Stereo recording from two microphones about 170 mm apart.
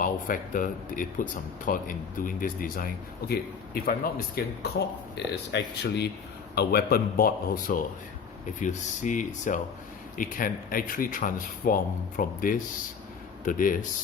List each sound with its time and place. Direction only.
0.0 s speech: 55° left (ahead or behind)
5.1 s speech: 80° left
6.6 s speech: 65° left (ahead or behind)